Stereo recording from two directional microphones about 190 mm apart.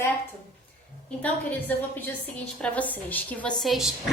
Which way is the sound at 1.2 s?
10° left (ahead or behind).